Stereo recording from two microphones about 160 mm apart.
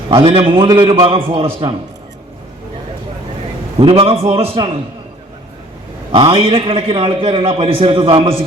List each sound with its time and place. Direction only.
0.1 s a man's voice: 35° right (ahead or behind)
3.8 s a man's voice: 35° right (ahead or behind)
6.1 s a man's voice: 35° right (ahead or behind)